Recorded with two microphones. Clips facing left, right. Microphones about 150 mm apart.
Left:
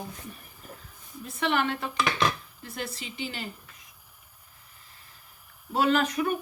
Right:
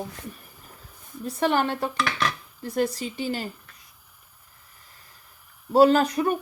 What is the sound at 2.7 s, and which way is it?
Speech, 40° right (ahead or behind).